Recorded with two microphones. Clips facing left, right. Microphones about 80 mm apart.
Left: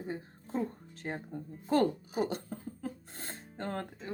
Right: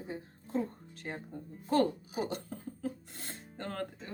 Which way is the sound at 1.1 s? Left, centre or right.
Left.